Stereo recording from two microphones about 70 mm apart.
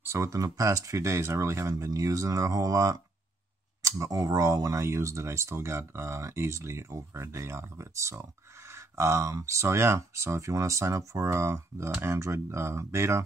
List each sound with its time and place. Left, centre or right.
0.0 s speech: right